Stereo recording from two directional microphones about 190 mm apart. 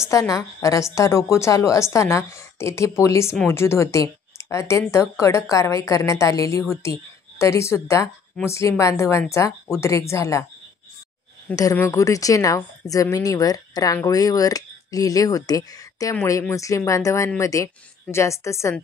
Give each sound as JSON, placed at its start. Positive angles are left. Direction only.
{"t": 0.0, "sound": "speech", "side_deg": 15}
{"t": 11.5, "sound": "speech", "side_deg": 15}